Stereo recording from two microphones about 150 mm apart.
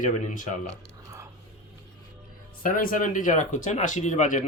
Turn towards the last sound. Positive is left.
turn(degrees=55)  # may be behind; listen again after turning